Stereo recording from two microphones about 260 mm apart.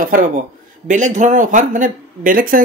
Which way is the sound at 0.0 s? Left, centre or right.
Right.